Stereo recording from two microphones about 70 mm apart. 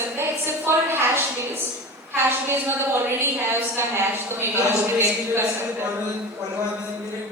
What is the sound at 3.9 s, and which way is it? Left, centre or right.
Speech, right.